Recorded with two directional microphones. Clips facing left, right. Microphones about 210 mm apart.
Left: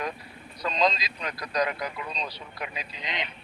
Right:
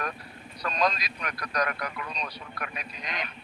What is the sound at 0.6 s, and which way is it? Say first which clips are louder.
Speech: left 2 dB; 20° left (ahead or behind).